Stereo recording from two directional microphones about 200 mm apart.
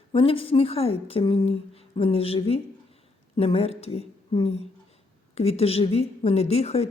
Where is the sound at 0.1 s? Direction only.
25° left (ahead or behind).